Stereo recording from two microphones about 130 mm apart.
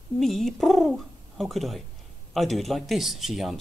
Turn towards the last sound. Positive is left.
turn(degrees=0)  # may be behind; listen again after turning